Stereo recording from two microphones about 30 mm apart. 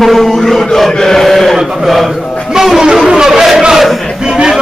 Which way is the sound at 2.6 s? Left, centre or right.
Centre.